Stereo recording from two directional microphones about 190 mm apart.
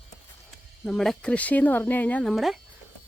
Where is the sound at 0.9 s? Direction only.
Centre (ahead or behind).